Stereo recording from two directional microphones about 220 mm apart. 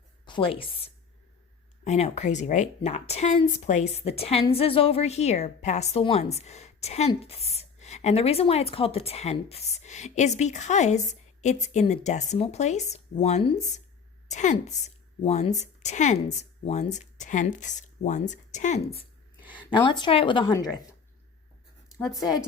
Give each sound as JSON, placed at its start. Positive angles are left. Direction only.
{"t": 0.3, "sound": "speech", "side_deg": 25}
{"t": 1.8, "sound": "a woman's voice", "side_deg": 30}
{"t": 19.4, "sound": "a sound", "side_deg": -5}
{"t": 19.7, "sound": "a woman's voice", "side_deg": 20}